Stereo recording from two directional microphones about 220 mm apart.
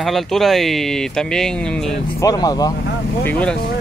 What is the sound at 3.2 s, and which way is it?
Speech, 5° left (ahead or behind).